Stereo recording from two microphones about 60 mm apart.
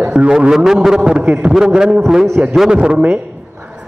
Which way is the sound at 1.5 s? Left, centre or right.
Centre.